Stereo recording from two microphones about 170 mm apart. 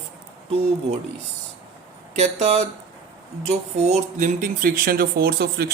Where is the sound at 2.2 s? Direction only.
40° right (ahead or behind); by 5.7 s 65° right (ahead or behind).